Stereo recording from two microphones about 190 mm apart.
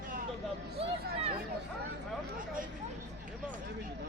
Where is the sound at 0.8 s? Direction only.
30° right (ahead or behind).